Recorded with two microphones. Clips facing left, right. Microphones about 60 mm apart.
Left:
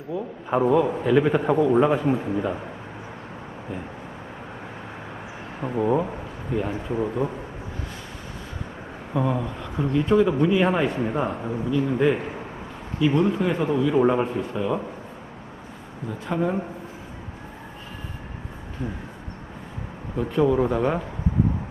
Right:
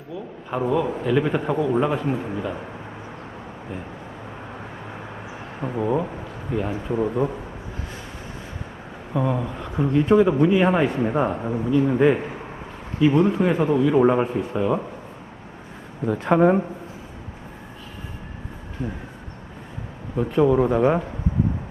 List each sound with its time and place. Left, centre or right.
0.5 s a man's voice: centre
5.5 s a man's voice: centre
9.1 s speech: centre
16.0 s speech: right
20.1 s speech: centre